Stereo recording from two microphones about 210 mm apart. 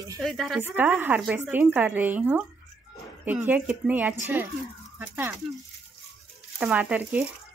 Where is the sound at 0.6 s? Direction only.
10° right (ahead or behind).